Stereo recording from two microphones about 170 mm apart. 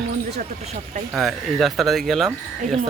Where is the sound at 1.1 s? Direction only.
Centre (ahead or behind).